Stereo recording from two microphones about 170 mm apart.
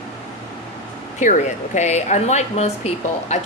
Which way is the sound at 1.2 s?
45° left (ahead or behind).